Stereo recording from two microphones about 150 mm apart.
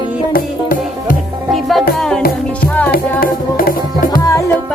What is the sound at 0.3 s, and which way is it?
Music, 70° left (ahead or behind).